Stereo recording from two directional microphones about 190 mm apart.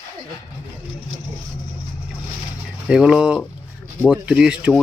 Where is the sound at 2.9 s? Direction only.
5° right (ahead or behind).